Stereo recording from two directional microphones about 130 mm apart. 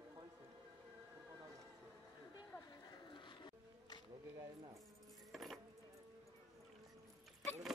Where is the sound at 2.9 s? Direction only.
35° left (ahead or behind).